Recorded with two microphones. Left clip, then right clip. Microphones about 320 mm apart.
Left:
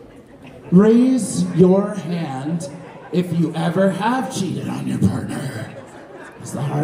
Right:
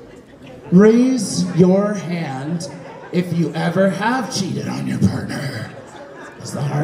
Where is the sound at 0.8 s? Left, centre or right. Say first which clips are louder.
Right 2 dB; right.